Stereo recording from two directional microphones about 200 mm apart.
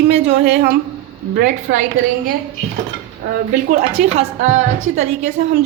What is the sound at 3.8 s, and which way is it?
A woman's voice, 30° right (ahead or behind).